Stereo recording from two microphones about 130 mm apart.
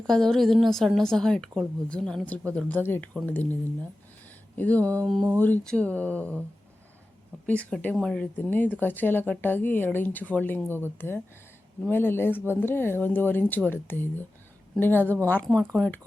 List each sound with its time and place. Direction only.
0.1 s a woman's voice: 5° left (ahead or behind)
7.4 s speech: 10° left (ahead or behind)